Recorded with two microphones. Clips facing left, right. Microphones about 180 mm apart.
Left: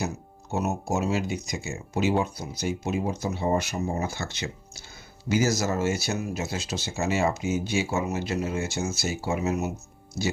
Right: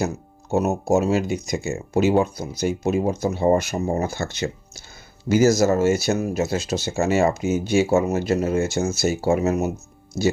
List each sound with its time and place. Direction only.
0.5 s speech: 45° right (ahead or behind)